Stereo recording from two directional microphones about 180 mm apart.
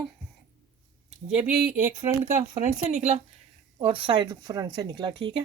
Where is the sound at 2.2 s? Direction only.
40° right (ahead or behind).